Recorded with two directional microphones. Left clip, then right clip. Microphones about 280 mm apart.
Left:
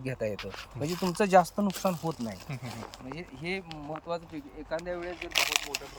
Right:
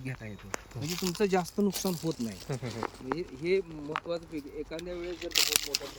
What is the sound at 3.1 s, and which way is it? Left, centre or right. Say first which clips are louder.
Speech: right 6 dB; centre.